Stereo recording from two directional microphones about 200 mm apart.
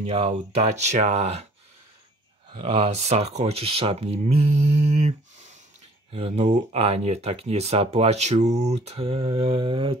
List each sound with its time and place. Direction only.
0.0 s speech: 30° right (ahead or behind)
2.5 s speech: 30° right (ahead or behind)